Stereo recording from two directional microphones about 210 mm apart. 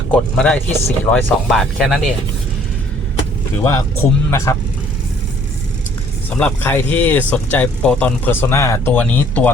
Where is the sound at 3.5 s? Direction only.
15° left (ahead or behind).